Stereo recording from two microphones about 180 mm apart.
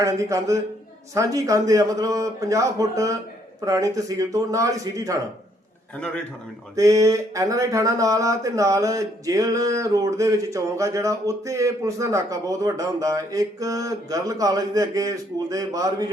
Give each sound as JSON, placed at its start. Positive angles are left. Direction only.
{"t": 0.0, "sound": "a man's voice", "side_deg": -15}
{"t": 6.7, "sound": "speech", "side_deg": -20}